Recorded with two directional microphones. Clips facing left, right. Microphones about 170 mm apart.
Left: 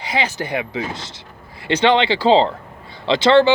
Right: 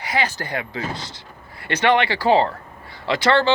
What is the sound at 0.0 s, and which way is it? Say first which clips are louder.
Speech: left 2 dB; 20° left (ahead or behind).